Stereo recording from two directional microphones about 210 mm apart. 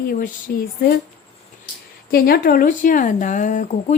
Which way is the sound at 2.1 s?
45° left (ahead or behind).